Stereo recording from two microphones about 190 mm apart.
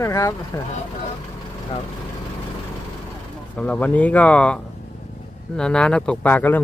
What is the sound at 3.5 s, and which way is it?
Speech, 5° left (ahead or behind).